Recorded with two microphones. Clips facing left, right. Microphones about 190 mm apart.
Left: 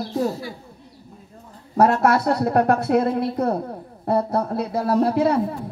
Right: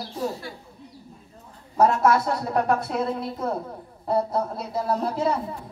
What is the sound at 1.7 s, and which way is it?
A woman's voice, 65° left (ahead or behind).